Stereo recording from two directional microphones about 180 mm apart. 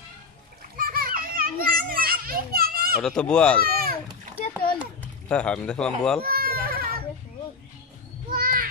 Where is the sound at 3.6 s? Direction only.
55° right (ahead or behind).